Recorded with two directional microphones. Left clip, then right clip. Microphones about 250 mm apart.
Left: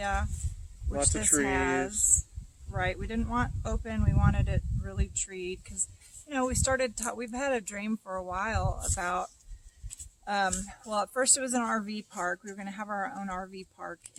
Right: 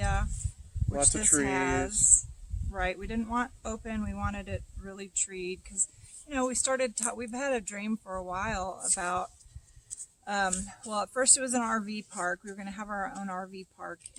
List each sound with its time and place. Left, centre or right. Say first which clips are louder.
0.0 s a sound: left 2 dB; centre
1.2 s speech: left 2 dB; centre
1.5 s speech: left 1 dB; centre
1.7 s speech: left 1 dB; centre
2.7 s speech: even; centre